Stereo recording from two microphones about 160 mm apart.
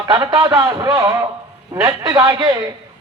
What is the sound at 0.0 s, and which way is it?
A man's voice, 25° right (ahead or behind).